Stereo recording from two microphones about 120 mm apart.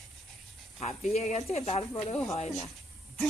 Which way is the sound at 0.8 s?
65° left (ahead or behind).